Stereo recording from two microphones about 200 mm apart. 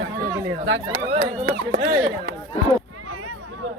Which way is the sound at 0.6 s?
55° right (ahead or behind).